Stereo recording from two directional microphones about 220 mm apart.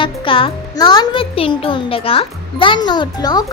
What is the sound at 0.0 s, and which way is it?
A child's voice, 25° left (ahead or behind).